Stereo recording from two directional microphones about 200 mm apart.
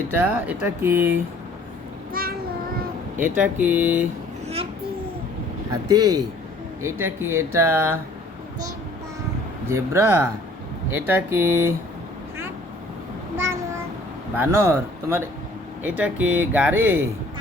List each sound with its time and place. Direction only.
0.2 s speech: 10° right (ahead or behind)
2.2 s child singing: 45° right (ahead or behind)
3.2 s speech: 10° right (ahead or behind)
5.7 s speech: 20° right (ahead or behind)
9.6 s speech: 15° right (ahead or behind)
13.3 s child singing: 15° right (ahead or behind)
14.3 s speech: 10° right (ahead or behind)